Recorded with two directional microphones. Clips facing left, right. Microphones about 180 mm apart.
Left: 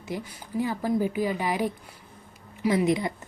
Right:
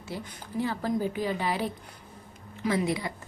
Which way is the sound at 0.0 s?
15° left (ahead or behind).